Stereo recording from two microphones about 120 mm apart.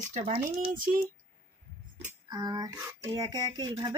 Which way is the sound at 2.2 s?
35° right (ahead or behind).